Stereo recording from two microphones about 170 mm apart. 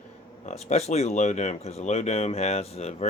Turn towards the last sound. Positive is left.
turn(degrees=40)  # may be behind; listen again after turning